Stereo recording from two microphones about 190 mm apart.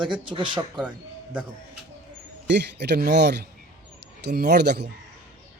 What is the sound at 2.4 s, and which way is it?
Speech, 65° right (ahead or behind).